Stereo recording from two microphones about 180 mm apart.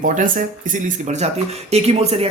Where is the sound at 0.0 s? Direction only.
45° right (ahead or behind).